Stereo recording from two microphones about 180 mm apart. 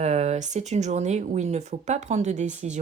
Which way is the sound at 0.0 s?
40° right (ahead or behind).